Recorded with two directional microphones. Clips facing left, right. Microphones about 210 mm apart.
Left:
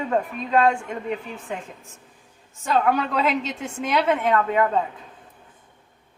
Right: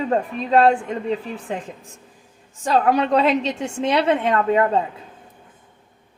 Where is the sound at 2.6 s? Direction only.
35° right (ahead or behind).